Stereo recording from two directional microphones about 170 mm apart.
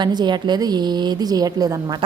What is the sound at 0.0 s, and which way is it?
A woman's voice, 25° right (ahead or behind).